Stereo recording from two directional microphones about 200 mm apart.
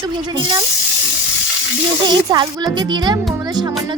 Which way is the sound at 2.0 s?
20° right (ahead or behind).